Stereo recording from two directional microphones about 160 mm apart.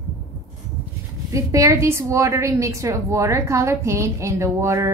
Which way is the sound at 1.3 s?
20° right (ahead or behind).